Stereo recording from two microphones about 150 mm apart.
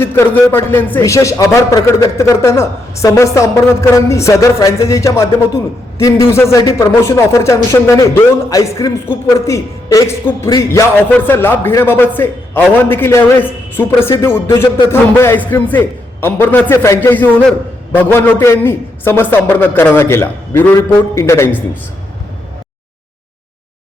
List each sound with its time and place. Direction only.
0.0 s a man's voice: 15° left (ahead or behind)